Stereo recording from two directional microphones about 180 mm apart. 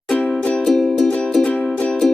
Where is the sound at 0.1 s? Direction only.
5° left (ahead or behind).